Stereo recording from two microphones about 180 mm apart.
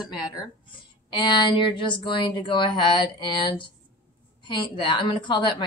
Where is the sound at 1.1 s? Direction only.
25° left (ahead or behind).